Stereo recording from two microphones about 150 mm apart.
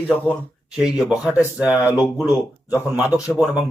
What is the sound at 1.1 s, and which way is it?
Speech, 5° right (ahead or behind).